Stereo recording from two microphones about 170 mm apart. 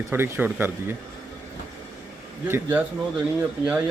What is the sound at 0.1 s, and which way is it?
Speech, 10° right (ahead or behind).